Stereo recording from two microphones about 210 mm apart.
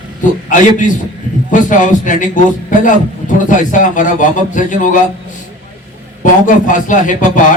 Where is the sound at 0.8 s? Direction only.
40° left (ahead or behind).